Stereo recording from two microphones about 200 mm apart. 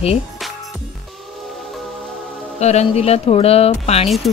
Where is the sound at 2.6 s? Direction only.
35° left (ahead or behind).